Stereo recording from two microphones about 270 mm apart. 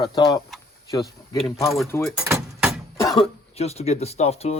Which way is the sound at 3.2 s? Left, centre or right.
Left.